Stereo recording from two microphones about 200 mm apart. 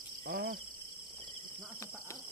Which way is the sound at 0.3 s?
45° right (ahead or behind).